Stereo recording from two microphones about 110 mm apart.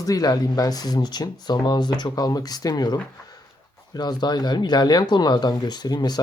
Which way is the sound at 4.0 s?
40° left (ahead or behind).